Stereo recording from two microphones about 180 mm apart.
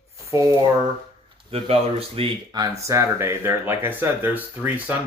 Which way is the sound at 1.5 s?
30° right (ahead or behind).